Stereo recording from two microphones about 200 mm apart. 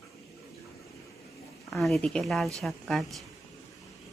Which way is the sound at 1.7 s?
Centre (ahead or behind).